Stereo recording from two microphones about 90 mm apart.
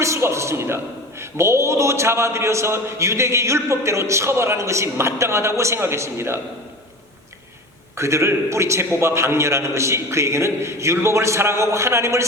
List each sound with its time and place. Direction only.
0.0 s a man's voice: 30° right (ahead or behind)
7.9 s a man's voice: 30° right (ahead or behind)